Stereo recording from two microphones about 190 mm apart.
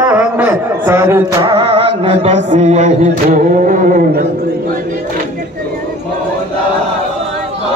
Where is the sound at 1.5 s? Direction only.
25° right (ahead or behind); by 4.3 s 45° right (ahead or behind).